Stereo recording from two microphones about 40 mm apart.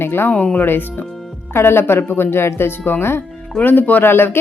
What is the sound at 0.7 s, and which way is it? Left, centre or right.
Speech, left.